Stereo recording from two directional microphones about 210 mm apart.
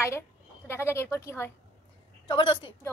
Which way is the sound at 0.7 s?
10° left (ahead or behind).